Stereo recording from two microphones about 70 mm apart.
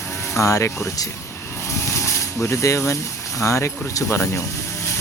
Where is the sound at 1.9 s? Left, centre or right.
Left.